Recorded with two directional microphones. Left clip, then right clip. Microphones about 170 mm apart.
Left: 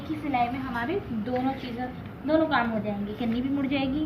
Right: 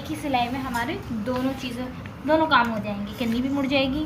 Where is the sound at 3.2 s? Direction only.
45° right (ahead or behind).